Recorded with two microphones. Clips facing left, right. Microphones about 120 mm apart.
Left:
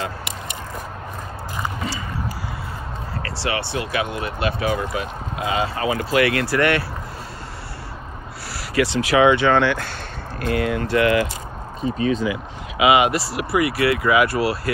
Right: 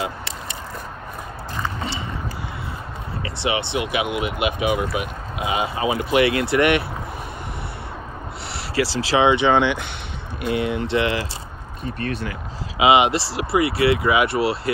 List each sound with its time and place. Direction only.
3.2 s speech: 20° right (ahead or behind)
8.7 s speech: 30° right (ahead or behind)
11.8 s speech: 60° right (ahead or behind)
12.7 s speech: 25° right (ahead or behind)